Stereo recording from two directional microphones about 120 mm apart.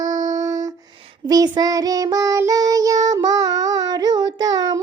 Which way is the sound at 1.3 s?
30° right (ahead or behind).